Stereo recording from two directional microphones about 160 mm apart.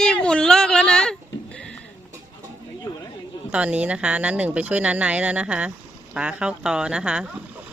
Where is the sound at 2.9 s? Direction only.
25° left (ahead or behind).